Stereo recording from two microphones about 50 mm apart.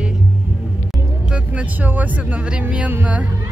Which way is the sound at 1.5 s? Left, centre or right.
Right.